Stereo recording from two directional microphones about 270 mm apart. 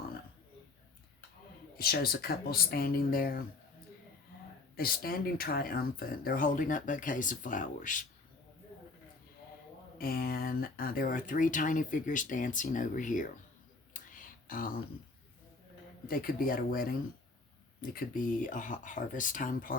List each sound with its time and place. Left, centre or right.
1.7 s speech: left
4.8 s speech: left
10.0 s speech: left
14.4 s speech: left
16.0 s speech: left